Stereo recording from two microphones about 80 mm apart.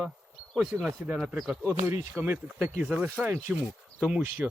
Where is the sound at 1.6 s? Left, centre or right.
Right.